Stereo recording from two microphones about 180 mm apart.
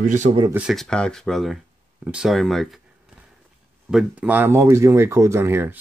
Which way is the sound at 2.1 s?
5° right (ahead or behind).